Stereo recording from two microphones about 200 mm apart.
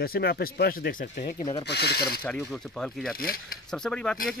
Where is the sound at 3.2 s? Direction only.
45° left (ahead or behind).